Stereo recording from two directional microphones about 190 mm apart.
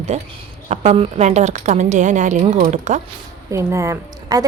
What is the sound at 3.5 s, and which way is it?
Speech, 15° right (ahead or behind).